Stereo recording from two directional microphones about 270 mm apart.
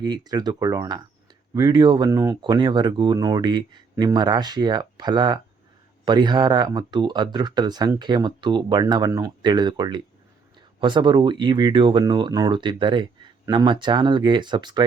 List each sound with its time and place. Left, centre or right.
0.0 s speech: centre